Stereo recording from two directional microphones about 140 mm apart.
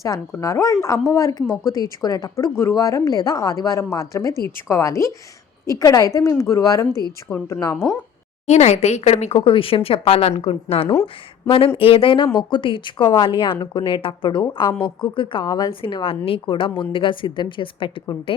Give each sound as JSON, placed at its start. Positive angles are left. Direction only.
{"t": 0.0, "sound": "a woman's voice", "side_deg": 20}
{"t": 7.3, "sound": "a woman's voice", "side_deg": 10}
{"t": 8.4, "sound": "a woman's voice", "side_deg": 55}